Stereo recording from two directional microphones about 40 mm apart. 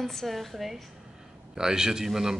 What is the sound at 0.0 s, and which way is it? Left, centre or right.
Speech, centre.